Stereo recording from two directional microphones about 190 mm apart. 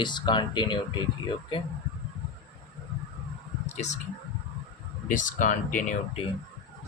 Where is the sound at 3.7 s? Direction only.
35° left (ahead or behind).